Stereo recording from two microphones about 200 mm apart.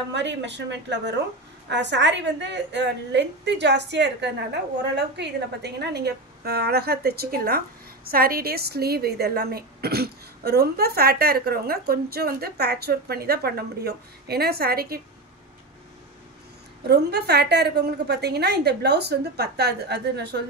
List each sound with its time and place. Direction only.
0.1 s a woman's voice: 60° right (ahead or behind)
16.8 s a woman's voice: 55° right (ahead or behind)